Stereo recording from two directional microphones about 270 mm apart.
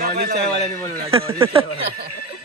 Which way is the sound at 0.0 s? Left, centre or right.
Right.